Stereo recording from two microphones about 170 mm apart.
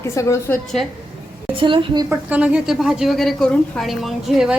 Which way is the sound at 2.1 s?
10° right (ahead or behind).